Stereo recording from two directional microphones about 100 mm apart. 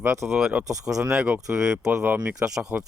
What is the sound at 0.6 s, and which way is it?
Speech, 35° right (ahead or behind).